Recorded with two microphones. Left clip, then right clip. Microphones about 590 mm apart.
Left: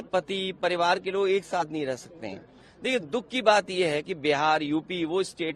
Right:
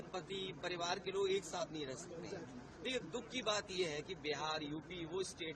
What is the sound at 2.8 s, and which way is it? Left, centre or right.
A man's voice, left.